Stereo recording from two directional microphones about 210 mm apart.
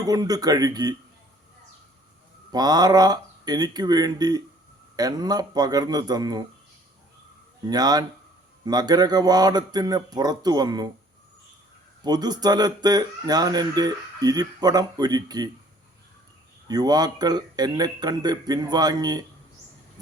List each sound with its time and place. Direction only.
0.0 s speech: 20° right (ahead or behind)
2.5 s speech: 20° right (ahead or behind)
7.7 s speech: 20° right (ahead or behind)
12.0 s speech: 20° right (ahead or behind)
16.6 s speech: 20° right (ahead or behind)